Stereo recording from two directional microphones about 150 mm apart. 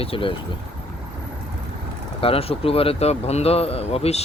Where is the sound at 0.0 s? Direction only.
35° left (ahead or behind).